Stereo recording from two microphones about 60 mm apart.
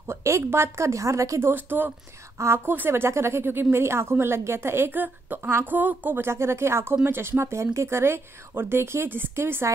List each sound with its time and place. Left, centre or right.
0.1 s a woman's voice: right
1.4 s a woman's voice: right
2.3 s a woman's voice: right
6.2 s speech: right